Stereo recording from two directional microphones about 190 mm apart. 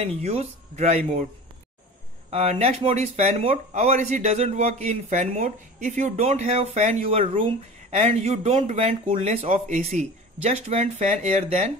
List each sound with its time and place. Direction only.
0.0 s speech: 35° right (ahead or behind)
2.3 s speech: 35° right (ahead or behind)